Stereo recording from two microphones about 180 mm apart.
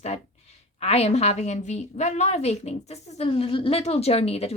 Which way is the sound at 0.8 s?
35° left (ahead or behind).